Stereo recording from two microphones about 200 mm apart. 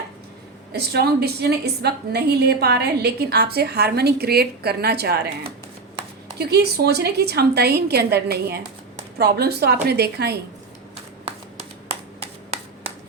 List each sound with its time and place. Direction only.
0.7 s a woman's voice: 55° right (ahead or behind)
6.4 s a woman's voice: 55° right (ahead or behind)